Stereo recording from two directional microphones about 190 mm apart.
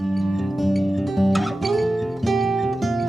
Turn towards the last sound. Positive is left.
turn(degrees=0)  # may be behind; listen again after turning